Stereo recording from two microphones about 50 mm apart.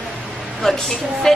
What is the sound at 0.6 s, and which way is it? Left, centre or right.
Speech, centre.